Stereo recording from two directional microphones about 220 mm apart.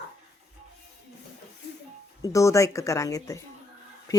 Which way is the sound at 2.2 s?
15° left (ahead or behind).